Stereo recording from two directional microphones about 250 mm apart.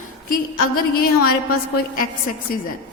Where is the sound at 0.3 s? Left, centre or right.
Left.